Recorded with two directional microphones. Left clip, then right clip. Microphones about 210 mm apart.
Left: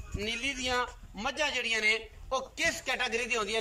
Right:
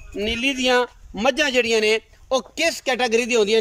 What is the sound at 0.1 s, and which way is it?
Speech, 40° right (ahead or behind).